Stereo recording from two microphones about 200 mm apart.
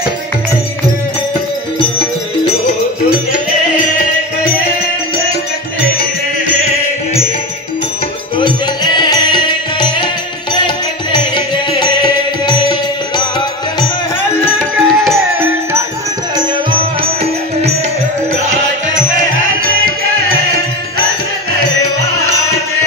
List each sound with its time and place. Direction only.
8.4 s music: 20° left (ahead or behind)
14.4 s music: 10° left (ahead or behind)
16.3 s music: 25° right (ahead or behind)